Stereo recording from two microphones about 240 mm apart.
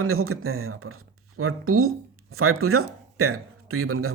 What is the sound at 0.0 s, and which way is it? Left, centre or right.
Speech, right.